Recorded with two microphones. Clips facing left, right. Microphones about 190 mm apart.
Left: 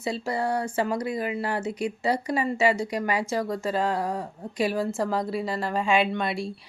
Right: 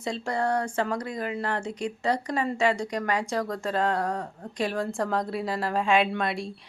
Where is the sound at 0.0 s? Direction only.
5° left (ahead or behind).